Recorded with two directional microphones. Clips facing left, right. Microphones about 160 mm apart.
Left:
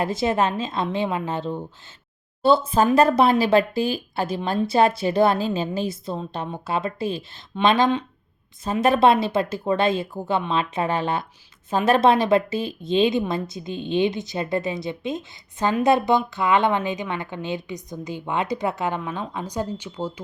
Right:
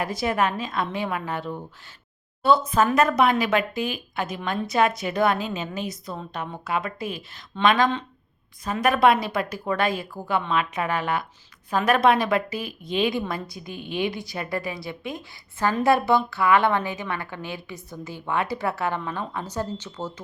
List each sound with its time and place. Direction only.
0.0 s a woman's voice: 25° left (ahead or behind)